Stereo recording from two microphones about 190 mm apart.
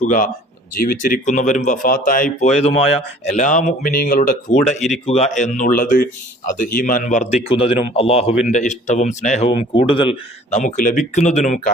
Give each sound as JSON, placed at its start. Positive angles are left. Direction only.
{"t": 0.0, "sound": "speech", "side_deg": 45}
{"t": 10.6, "sound": "speech", "side_deg": 45}